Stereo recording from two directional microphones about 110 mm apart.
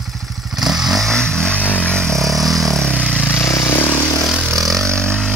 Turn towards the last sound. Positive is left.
turn(degrees=10)  # may be behind; listen again after turning